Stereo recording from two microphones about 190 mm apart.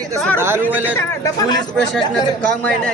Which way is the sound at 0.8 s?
15° left (ahead or behind).